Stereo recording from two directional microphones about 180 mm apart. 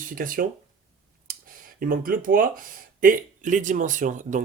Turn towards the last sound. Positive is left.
turn(degrees=-45)  # may be behind; listen again after turning